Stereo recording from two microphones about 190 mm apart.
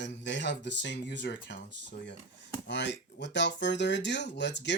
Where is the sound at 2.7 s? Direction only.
65° left (ahead or behind).